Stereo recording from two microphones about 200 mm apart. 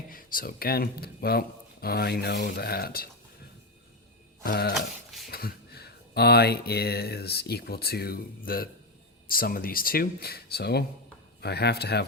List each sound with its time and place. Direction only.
0.1 s speech: 45° left (ahead or behind)
4.4 s speech: 50° left (ahead or behind)